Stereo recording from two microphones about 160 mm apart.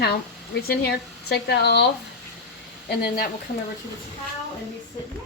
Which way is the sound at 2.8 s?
75° left (ahead or behind).